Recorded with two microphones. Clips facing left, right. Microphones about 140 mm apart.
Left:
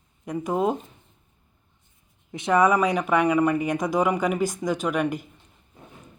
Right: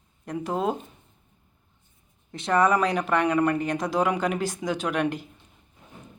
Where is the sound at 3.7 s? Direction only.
15° left (ahead or behind).